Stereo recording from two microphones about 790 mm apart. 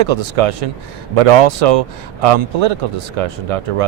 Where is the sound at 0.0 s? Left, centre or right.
Right.